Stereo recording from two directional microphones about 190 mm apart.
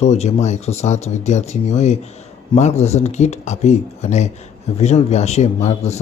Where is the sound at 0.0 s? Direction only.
35° left (ahead or behind).